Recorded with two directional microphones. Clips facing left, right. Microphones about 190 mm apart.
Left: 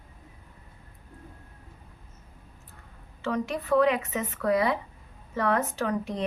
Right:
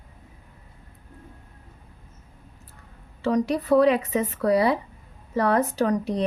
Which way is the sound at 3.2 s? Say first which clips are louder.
Right 6 dB; 35° right (ahead or behind).